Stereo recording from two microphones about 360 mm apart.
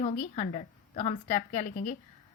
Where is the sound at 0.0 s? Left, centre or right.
Centre.